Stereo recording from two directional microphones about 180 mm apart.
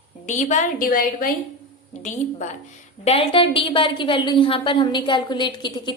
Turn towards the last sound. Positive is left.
turn(degrees=25)  # may be behind; listen again after turning